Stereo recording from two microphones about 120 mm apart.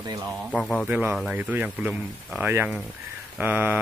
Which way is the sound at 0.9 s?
15° right (ahead or behind).